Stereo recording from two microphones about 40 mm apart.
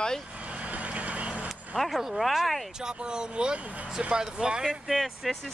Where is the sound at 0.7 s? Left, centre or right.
Right.